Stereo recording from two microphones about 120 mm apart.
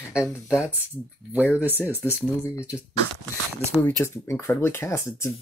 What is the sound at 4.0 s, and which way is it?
Speech, 20° left (ahead or behind).